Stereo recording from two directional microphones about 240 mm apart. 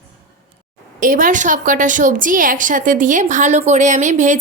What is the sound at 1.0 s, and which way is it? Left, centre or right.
A woman's voice, right.